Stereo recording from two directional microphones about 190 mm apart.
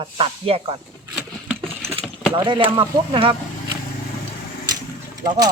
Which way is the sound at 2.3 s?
25° right (ahead or behind).